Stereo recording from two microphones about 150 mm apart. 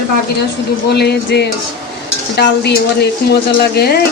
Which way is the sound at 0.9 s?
90° left.